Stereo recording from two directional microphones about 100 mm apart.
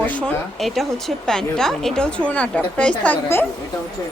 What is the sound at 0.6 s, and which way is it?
A woman's voice, centre (ahead or behind).